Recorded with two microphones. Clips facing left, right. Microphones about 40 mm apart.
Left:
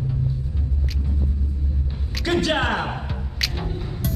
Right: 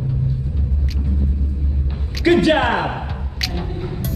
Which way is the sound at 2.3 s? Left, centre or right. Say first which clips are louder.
Right 7 dB; centre.